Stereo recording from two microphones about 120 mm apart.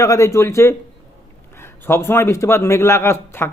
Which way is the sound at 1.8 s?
20° left (ahead or behind).